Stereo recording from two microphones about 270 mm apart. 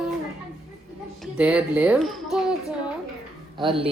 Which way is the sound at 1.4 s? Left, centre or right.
Centre.